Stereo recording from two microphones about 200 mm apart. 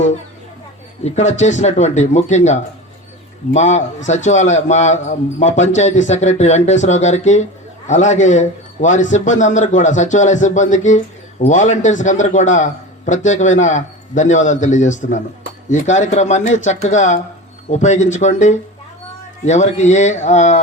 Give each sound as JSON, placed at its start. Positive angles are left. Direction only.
{"t": 1.0, "sound": "a man's voice", "side_deg": 35}